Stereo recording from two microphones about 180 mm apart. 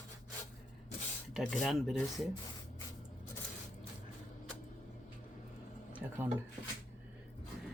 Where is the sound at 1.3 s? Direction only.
Centre (ahead or behind).